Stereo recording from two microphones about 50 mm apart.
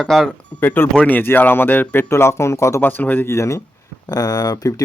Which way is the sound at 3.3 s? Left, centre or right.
Left.